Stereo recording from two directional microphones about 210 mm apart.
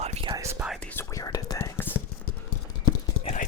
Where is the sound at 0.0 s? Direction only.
30° right (ahead or behind).